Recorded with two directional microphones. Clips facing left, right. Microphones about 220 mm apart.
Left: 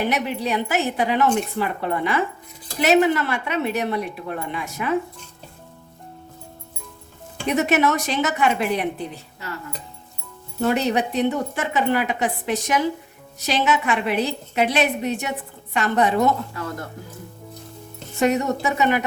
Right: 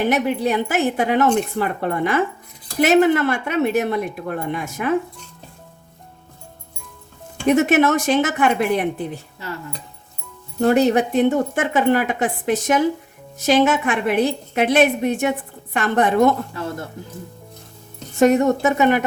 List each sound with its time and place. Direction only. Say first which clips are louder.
0.1 s speech: right 4 dB; 50° right (ahead or behind)
7.4 s speech: right 4 dB; 50° right (ahead or behind)
10.6 s speech: right 5 dB; 45° right (ahead or behind)
18.2 s speech: right 6 dB; 50° right (ahead or behind)